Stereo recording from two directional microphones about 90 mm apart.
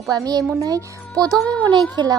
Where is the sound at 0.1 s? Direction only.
45° right (ahead or behind).